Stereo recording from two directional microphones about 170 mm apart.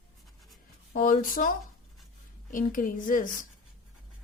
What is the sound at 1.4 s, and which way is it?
Speech, 50° left (ahead or behind).